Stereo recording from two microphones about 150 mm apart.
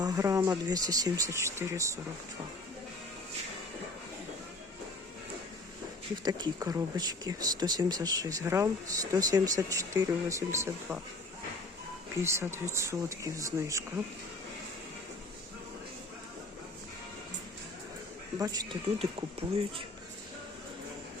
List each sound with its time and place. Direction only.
0.0 s speech: 20° right (ahead or behind)
6.2 s speech: 25° right (ahead or behind)
12.2 s speech: 15° right (ahead or behind)
18.3 s speech: 20° right (ahead or behind)
18.9 s speech: 40° right (ahead or behind)